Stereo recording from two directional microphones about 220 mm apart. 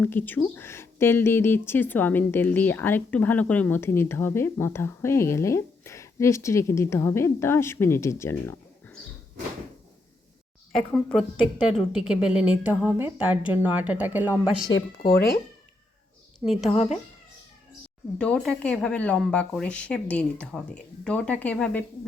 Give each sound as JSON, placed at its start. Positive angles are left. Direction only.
{"t": 0.0, "sound": "speech", "side_deg": 10}
{"t": 10.8, "sound": "a woman's voice", "side_deg": 5}
{"t": 15.1, "sound": "speech", "side_deg": 40}
{"t": 16.4, "sound": "speech", "side_deg": 0}
{"t": 16.6, "sound": "speech", "side_deg": 30}
{"t": 18.2, "sound": "speech", "side_deg": 5}